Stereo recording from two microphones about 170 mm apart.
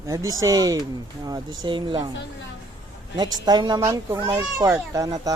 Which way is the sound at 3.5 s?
25° right (ahead or behind).